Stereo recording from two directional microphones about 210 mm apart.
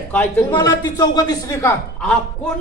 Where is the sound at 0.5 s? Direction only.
15° left (ahead or behind).